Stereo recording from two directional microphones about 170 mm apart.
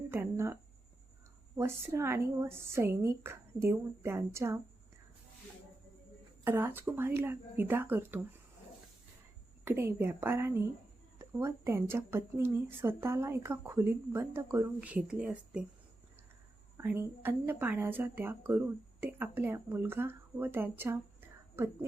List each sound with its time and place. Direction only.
0.1 s a sound: 15° right (ahead or behind)
1.5 s speech: 15° right (ahead or behind)
6.4 s speech: 10° right (ahead or behind)
9.6 s speech: 15° right (ahead or behind)
16.7 s speech: 15° right (ahead or behind)